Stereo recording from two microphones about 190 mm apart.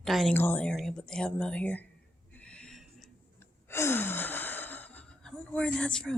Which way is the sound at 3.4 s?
15° left (ahead or behind).